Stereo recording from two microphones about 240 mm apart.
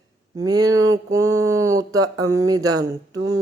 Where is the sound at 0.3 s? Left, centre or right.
Centre.